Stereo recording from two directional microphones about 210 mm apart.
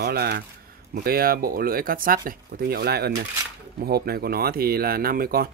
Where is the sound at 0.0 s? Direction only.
50° right (ahead or behind).